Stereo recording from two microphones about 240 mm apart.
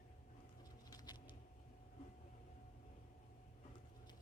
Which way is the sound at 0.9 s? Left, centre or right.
Centre.